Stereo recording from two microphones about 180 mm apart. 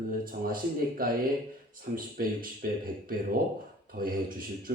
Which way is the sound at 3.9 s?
55° right (ahead or behind).